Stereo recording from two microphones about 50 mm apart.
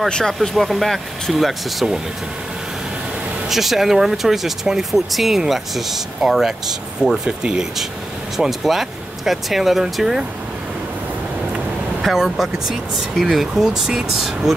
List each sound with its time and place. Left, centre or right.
0.1 s speech: centre
3.4 s speech: centre
12.0 s speech: centre